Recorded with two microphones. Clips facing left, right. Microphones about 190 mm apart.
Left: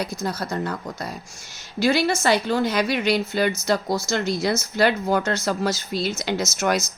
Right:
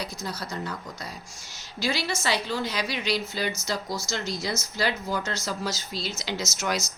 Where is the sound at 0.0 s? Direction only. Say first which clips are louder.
Left 7 dB; 50° left (ahead or behind).